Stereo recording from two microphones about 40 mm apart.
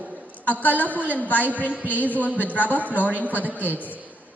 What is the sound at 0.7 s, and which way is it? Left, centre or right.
Speech, left.